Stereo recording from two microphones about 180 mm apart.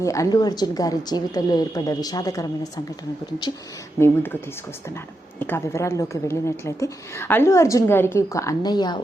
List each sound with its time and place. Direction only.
0.0 s a woman's voice: 15° left (ahead or behind)
4.0 s a woman's voice: 10° left (ahead or behind)
5.4 s a woman's voice: 10° left (ahead or behind)